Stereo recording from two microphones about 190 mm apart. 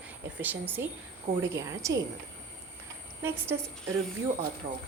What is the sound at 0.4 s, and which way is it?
A woman's voice, 10° right (ahead or behind).